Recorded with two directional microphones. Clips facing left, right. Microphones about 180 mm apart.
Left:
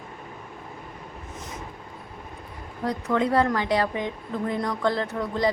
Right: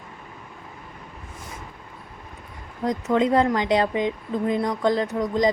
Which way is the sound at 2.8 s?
20° right (ahead or behind).